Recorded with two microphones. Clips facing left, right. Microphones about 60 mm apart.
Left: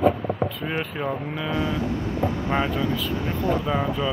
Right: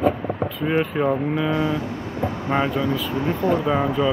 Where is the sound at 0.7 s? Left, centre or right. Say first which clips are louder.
Right 7 dB; centre.